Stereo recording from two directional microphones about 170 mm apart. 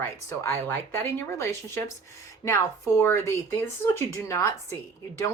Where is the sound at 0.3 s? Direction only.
15° left (ahead or behind).